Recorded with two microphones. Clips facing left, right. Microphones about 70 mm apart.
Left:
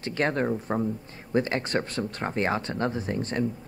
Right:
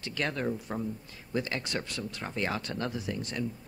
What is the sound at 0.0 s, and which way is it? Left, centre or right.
Speech, left.